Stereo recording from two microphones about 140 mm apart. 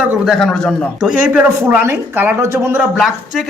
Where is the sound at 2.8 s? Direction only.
Centre (ahead or behind).